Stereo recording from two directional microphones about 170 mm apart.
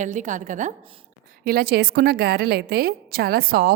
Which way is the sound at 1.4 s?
65° right (ahead or behind).